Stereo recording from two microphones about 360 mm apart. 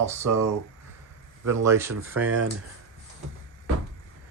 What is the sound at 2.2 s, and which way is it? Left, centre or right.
Speech, right.